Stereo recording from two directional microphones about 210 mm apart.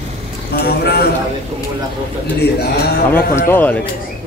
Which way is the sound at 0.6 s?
50° left (ahead or behind).